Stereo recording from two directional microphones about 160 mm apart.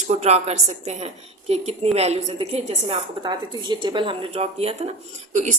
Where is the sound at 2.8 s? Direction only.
30° right (ahead or behind).